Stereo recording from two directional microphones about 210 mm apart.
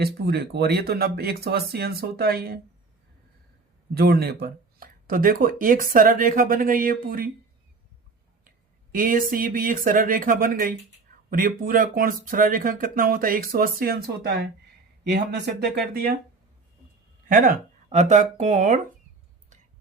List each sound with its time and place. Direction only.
0.0 s speech: 50° right (ahead or behind)
3.9 s speech: 50° right (ahead or behind)
8.4 s a sound: 40° right (ahead or behind)
9.3 s speech: 40° right (ahead or behind)
17.2 s speech: 40° right (ahead or behind)